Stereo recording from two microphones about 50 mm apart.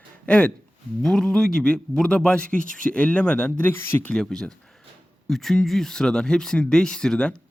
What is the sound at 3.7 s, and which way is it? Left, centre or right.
Speech, left.